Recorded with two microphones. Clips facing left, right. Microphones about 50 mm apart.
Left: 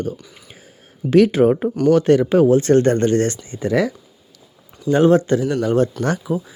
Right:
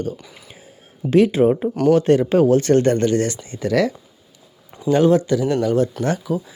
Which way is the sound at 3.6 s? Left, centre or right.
Left.